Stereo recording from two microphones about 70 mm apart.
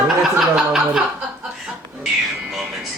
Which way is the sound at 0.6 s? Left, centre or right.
Centre.